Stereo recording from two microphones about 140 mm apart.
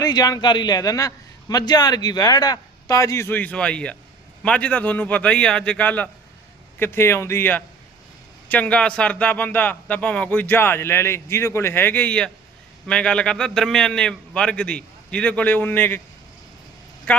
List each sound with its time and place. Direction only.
0.0 s a man's voice: 30° left (ahead or behind); by 16.0 s 15° left (ahead or behind)
17.1 s a man's voice: 10° left (ahead or behind)